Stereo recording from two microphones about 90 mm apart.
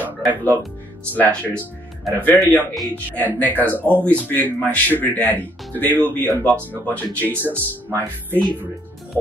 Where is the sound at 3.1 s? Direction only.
20° left (ahead or behind).